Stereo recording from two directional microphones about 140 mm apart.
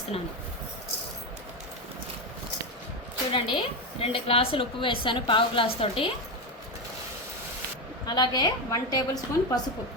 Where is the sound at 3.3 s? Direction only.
40° left (ahead or behind).